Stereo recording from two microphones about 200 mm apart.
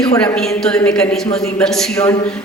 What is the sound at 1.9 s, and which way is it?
Speech, 15° left (ahead or behind).